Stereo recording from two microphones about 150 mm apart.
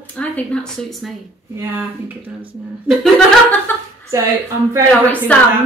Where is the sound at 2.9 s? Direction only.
5° left (ahead or behind).